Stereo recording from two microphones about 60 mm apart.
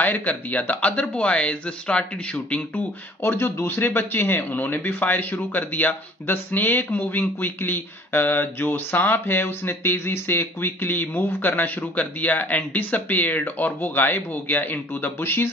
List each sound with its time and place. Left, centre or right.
0.0 s speech: left
2.7 s speech: left